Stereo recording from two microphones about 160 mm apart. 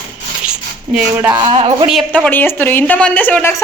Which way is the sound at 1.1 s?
15° right (ahead or behind).